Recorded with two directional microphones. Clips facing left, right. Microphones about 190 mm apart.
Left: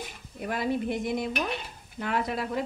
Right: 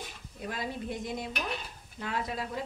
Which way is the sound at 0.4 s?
65° left (ahead or behind).